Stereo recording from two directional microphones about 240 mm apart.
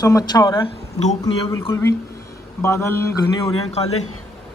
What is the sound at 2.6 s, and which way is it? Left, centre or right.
Speech, centre.